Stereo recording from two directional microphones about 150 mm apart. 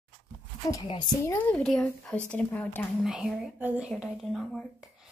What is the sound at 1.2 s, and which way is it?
Speech, 20° left (ahead or behind).